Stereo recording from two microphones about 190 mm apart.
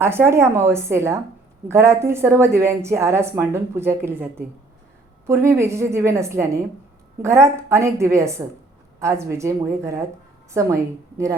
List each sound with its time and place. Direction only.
0.0 s a woman's voice: 10° right (ahead or behind)